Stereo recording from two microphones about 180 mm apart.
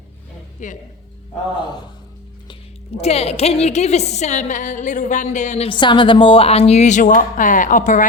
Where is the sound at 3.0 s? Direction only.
35° left (ahead or behind).